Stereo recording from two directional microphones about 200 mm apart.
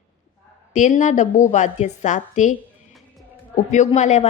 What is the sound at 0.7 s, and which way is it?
A woman's voice, 40° left (ahead or behind).